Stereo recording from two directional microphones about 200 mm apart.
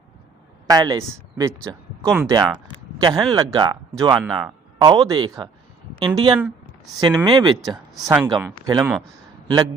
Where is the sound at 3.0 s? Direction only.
20° right (ahead or behind).